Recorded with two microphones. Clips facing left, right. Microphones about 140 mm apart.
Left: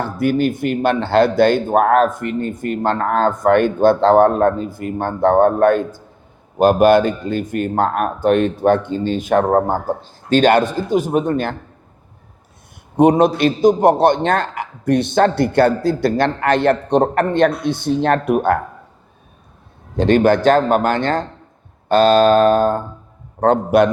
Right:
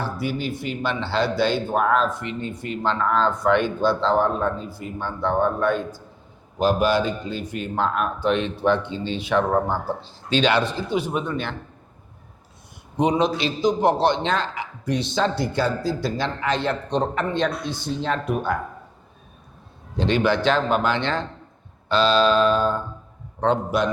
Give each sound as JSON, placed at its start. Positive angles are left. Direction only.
{"t": 0.0, "sound": "speech", "side_deg": 55}
{"t": 13.0, "sound": "a man's voice", "side_deg": 55}
{"t": 20.0, "sound": "a man's voice", "side_deg": 50}